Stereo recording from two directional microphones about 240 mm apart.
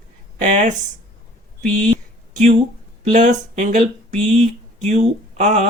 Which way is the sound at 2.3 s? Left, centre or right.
Right.